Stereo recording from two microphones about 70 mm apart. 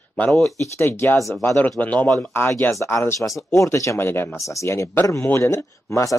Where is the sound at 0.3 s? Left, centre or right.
Centre.